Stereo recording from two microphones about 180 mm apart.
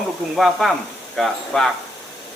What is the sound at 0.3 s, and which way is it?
Speech, centre (ahead or behind).